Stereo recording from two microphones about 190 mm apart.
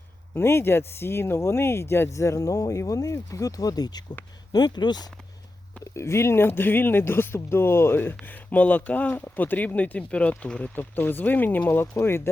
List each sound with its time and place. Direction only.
0.3 s speech: 10° left (ahead or behind)